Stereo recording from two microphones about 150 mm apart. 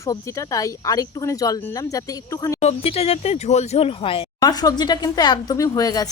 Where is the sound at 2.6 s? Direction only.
45° left (ahead or behind).